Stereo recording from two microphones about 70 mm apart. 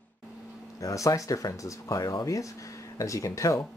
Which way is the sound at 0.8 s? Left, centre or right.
Left.